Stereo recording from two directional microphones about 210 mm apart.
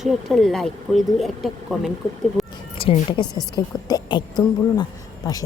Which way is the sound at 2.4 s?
Centre (ahead or behind).